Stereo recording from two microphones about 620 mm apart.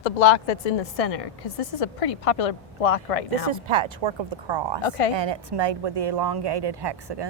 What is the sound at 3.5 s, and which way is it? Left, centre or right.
Speech, right.